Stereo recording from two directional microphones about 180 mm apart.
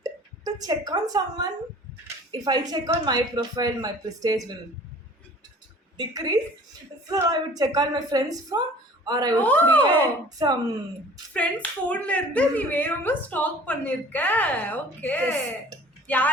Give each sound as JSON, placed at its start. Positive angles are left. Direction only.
{"t": 0.0, "sound": "a sound", "side_deg": -20}
{"t": 2.3, "sound": "a woman's voice", "side_deg": -20}
{"t": 6.0, "sound": "a woman's voice", "side_deg": -20}
{"t": 9.3, "sound": "speech", "side_deg": 10}
{"t": 10.2, "sound": "a woman's voice", "side_deg": -20}
{"t": 11.3, "sound": "speech", "side_deg": 5}